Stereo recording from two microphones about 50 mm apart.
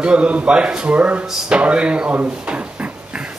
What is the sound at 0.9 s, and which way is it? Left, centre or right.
Speech, right.